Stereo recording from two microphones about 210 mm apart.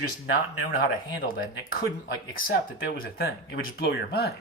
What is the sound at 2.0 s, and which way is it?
Speech, 55° left (ahead or behind).